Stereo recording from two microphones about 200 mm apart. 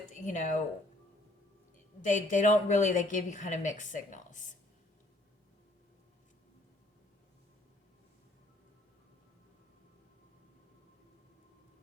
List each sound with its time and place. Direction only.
0.1 s speech: 40° left (ahead or behind)
2.0 s a woman's voice: 40° left (ahead or behind)